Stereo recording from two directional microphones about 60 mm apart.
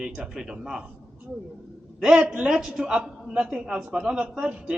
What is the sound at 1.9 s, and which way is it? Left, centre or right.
A man's voice, centre.